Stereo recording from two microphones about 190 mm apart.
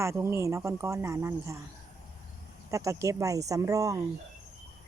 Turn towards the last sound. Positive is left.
turn(degrees=-15)  # may be behind; listen again after turning